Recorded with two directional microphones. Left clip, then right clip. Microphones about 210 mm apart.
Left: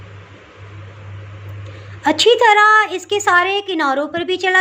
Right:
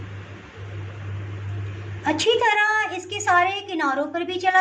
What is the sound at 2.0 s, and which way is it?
A woman's voice, 45° left (ahead or behind).